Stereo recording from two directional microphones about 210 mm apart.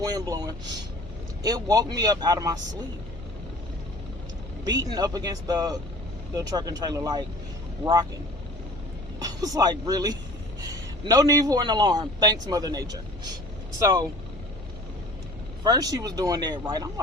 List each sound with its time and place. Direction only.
0.0 s a man's voice: 15° right (ahead or behind)
4.6 s a man's voice: 20° right (ahead or behind)
9.1 s a man's voice: 15° right (ahead or behind)
15.6 s a man's voice: 15° right (ahead or behind)